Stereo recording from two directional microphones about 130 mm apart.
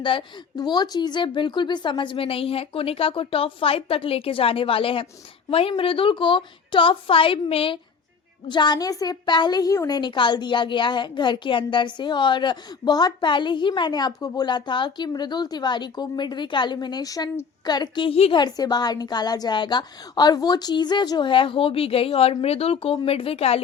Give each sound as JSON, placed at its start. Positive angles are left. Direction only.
{"t": 0.0, "sound": "a woman's voice", "side_deg": 40}
{"t": 18.3, "sound": "a woman's voice", "side_deg": 30}